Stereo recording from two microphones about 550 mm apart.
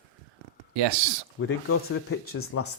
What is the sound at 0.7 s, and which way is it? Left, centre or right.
Speech, right.